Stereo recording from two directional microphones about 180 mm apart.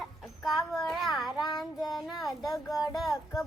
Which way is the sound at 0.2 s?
Centre (ahead or behind).